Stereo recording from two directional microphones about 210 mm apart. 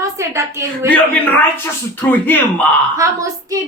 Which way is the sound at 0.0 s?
15° right (ahead or behind).